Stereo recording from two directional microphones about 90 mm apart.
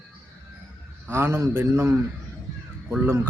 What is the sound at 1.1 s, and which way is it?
Speech, 30° right (ahead or behind).